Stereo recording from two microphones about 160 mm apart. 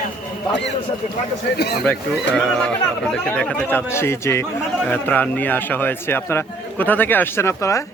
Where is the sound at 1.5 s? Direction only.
85° left.